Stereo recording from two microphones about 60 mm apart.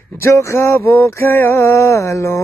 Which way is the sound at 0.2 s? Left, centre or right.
Left.